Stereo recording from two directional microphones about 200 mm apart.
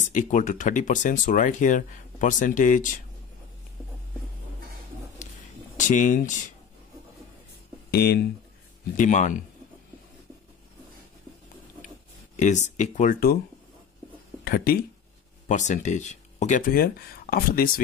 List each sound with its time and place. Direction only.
0.0 s speech: 40° left (ahead or behind)
5.8 s speech: 40° left (ahead or behind)
7.9 s speech: 50° left (ahead or behind)
8.9 s speech: 40° left (ahead or behind)
12.4 s speech: 35° left (ahead or behind)
14.4 s speech: 50° left (ahead or behind)
15.4 s speech: 35° left (ahead or behind)